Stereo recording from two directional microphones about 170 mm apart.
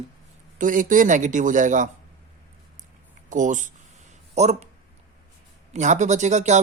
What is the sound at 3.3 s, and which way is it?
Speech, 50° right (ahead or behind).